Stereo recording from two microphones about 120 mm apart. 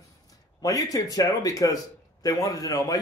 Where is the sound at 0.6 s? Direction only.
30° left (ahead or behind).